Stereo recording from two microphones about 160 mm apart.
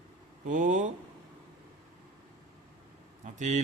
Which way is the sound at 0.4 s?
55° right (ahead or behind).